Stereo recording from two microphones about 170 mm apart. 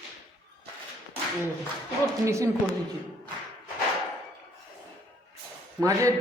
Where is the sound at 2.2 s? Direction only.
15° right (ahead or behind).